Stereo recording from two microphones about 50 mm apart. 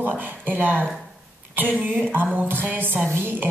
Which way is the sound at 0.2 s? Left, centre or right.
Right.